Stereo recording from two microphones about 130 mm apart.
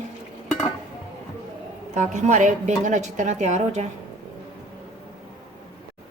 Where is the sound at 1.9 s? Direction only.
60° right (ahead or behind).